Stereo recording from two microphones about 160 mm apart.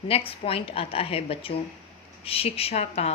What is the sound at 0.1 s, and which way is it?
Speech, 35° left (ahead or behind).